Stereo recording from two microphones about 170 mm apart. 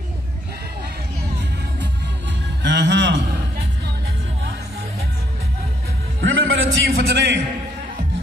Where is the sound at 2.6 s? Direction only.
90° right.